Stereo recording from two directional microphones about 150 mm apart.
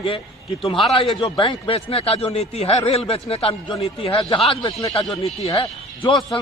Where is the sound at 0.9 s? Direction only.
35° left (ahead or behind).